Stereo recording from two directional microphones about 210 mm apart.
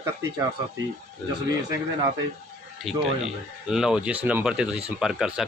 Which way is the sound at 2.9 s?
Centre (ahead or behind).